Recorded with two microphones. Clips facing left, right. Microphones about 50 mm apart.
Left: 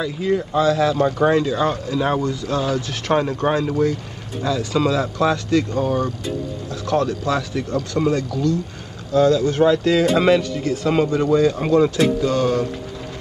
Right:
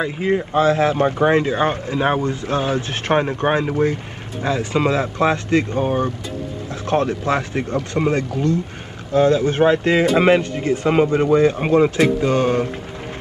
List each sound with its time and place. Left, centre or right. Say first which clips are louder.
0.0 s speech: right 1 dB; right